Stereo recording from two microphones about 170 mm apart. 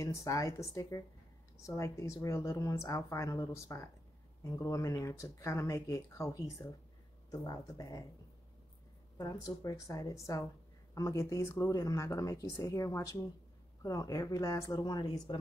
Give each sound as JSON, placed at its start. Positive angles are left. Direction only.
{"t": 0.0, "sound": "speech", "side_deg": 20}
{"t": 9.2, "sound": "speech", "side_deg": 20}